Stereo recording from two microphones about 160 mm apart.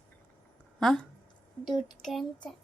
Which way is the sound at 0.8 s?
5° left (ahead or behind).